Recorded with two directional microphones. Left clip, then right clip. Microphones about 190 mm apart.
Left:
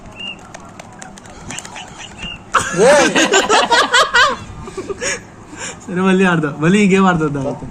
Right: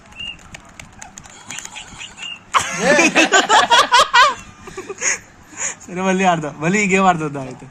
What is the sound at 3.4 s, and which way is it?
Laughter, 50° right (ahead or behind).